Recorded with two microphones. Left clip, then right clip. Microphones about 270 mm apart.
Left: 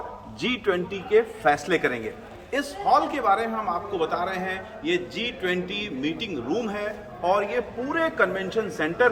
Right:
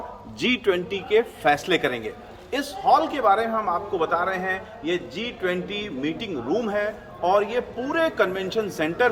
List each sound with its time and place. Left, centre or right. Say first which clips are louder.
0.3 s a man's voice: right 3 dB; right